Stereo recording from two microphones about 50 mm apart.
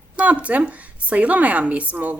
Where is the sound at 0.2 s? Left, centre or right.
Right.